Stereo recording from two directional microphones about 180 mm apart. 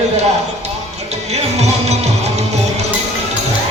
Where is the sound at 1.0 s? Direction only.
35° right (ahead or behind).